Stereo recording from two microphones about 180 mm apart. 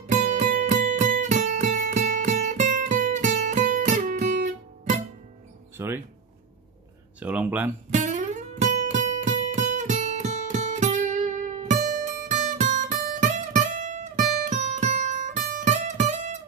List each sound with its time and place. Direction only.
0.0 s music: 45° right (ahead or behind)
5.8 s a sound: 10° right (ahead or behind)
7.2 s speech: 5° right (ahead or behind)
7.9 s music: 40° right (ahead or behind)